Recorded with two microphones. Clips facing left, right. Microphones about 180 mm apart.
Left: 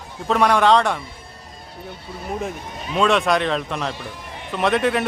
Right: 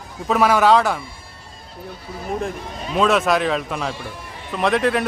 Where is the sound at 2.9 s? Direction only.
Centre (ahead or behind).